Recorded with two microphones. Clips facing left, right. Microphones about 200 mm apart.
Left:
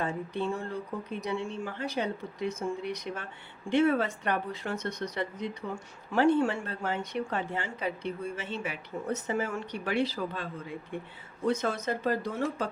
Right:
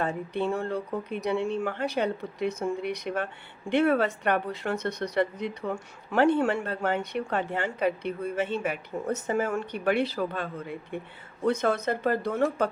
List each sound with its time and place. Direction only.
0.0 s a woman's voice: 60° right (ahead or behind)